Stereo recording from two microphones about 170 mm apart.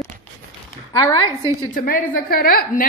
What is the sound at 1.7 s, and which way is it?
A woman's voice, 55° left (ahead or behind).